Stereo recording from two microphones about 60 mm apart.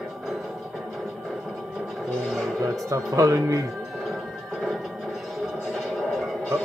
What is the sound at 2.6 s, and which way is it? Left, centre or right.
Speech, right.